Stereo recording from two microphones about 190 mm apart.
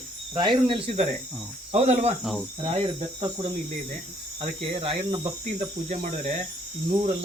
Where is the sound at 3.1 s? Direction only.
25° right (ahead or behind).